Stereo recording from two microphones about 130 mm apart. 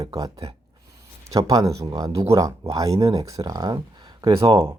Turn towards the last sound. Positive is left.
turn(degrees=-20)  # may be behind; listen again after turning